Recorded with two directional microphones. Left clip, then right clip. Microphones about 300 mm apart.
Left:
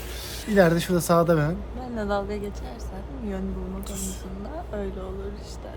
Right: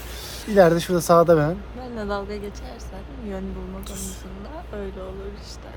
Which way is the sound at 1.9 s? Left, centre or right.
Centre.